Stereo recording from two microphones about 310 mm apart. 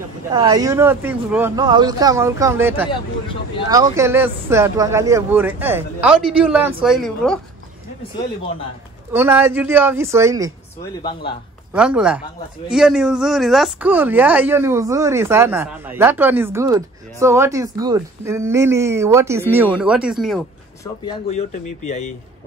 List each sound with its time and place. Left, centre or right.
0.3 s a woman's voice: centre
9.1 s speech: centre
10.8 s speech: centre
11.7 s a woman's voice: centre
21.0 s speech: centre